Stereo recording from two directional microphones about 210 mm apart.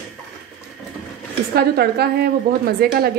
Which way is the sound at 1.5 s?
50° right (ahead or behind).